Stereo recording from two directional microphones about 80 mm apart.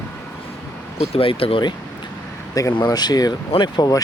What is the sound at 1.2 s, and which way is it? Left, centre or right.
Speech, left.